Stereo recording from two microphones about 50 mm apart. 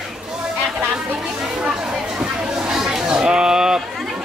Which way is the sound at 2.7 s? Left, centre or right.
Centre.